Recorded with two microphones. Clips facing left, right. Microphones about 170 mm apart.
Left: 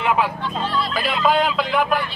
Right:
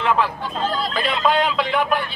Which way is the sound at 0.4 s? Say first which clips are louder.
Even; 45° right (ahead or behind).